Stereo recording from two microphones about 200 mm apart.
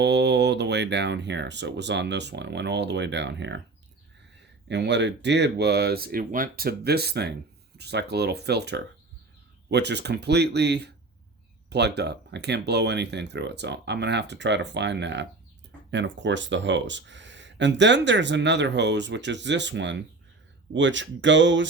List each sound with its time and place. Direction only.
0.0 s speech: 60° right (ahead or behind)
4.7 s speech: 60° right (ahead or behind)